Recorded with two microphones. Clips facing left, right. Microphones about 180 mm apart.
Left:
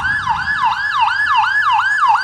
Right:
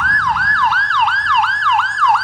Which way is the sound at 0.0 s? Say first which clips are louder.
Right 2 dB; 20° left (ahead or behind).